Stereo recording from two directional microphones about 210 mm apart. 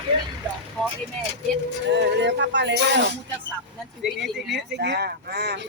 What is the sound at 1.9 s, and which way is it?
Speech, 55° right (ahead or behind).